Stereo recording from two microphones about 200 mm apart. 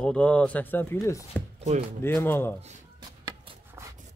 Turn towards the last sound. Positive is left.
turn(degrees=-15)  # may be behind; listen again after turning